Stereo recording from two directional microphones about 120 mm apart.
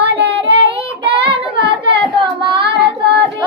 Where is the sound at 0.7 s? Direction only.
45° right (ahead or behind).